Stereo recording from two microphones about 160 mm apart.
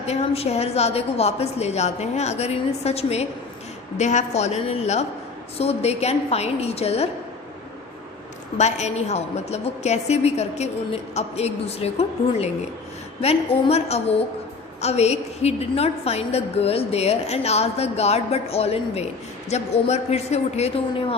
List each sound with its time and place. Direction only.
0.0 s a woman's voice: 40° left (ahead or behind)
8.5 s a woman's voice: 45° left (ahead or behind)